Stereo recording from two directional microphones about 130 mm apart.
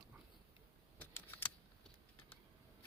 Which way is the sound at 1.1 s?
15° left (ahead or behind).